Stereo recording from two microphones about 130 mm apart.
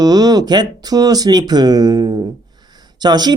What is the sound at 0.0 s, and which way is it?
Speech, 30° right (ahead or behind).